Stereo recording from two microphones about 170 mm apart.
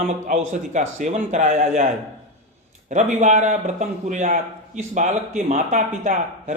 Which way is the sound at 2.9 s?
45° right (ahead or behind).